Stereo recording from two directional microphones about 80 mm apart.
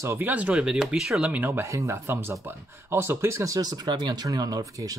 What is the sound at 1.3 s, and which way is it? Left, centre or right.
Speech, right.